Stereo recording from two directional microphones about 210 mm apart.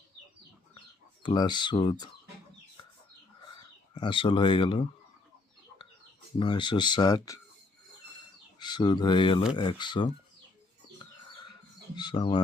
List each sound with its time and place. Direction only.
1.2 s speech: 20° left (ahead or behind)
3.9 s speech: 25° left (ahead or behind)
6.4 s speech: 20° left (ahead or behind)
8.5 s speech: 20° left (ahead or behind)
11.9 s speech: 20° left (ahead or behind)